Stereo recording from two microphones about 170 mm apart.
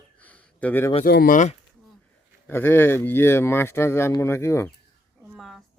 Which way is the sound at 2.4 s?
10° left (ahead or behind).